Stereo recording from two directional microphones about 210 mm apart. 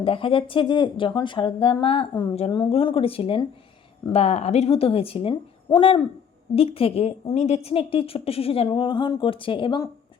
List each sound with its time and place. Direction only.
0.0 s speech: 25° left (ahead or behind)